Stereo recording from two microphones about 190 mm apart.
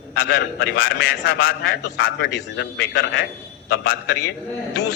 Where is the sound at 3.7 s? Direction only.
50° left (ahead or behind).